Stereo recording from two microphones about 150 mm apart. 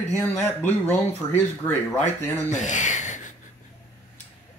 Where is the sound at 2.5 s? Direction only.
55° left (ahead or behind).